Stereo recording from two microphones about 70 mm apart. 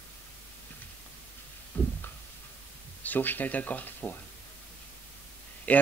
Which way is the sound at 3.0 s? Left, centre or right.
Left.